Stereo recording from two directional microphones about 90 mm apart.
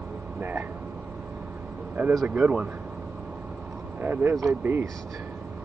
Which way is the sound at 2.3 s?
15° right (ahead or behind).